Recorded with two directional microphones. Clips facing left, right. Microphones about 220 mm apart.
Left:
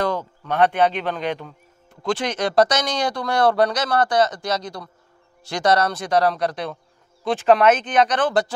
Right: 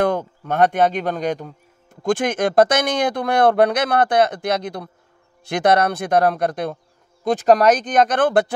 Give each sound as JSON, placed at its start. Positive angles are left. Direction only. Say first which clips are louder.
{"t": 0.4, "sound": "speech", "louder": "right 1 dB", "side_deg": -45}
{"t": 7.2, "sound": "speech", "louder": "right 2 dB", "side_deg": -40}